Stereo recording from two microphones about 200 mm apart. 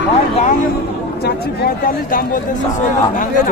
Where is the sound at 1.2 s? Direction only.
50° left (ahead or behind).